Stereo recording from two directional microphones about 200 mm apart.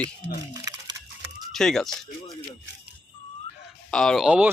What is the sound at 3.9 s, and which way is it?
Speech, centre (ahead or behind).